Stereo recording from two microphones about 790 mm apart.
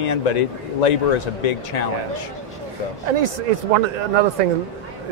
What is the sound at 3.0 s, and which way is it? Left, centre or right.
Speech, right.